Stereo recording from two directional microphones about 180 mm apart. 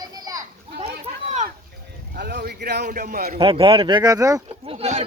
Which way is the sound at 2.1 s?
60° right (ahead or behind).